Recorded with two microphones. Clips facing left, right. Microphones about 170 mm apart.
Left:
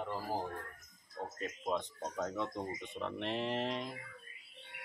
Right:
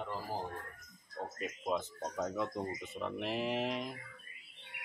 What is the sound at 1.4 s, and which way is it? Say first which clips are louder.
Speech: right 1 dB; 5° right (ahead or behind).